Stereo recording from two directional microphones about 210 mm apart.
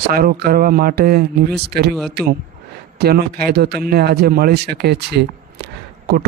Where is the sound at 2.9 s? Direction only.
50° right (ahead or behind).